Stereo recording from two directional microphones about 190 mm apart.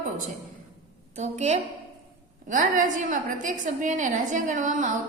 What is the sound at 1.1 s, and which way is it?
A woman's voice, 35° right (ahead or behind).